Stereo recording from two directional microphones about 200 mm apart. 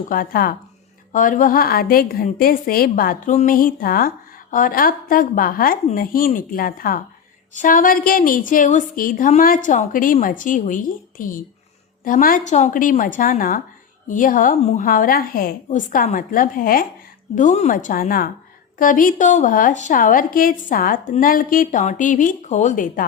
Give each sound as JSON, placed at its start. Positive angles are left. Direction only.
{"t": 0.1, "sound": "a woman's voice", "side_deg": 45}